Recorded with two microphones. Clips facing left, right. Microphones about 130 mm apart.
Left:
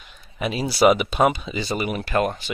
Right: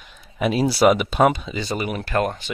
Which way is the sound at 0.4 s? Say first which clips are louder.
Right 2 dB; centre (ahead or behind).